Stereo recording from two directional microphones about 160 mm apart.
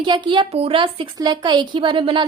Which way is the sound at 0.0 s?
30° right (ahead or behind).